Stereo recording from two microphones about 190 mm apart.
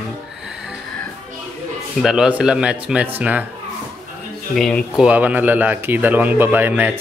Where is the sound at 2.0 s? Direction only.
5° right (ahead or behind).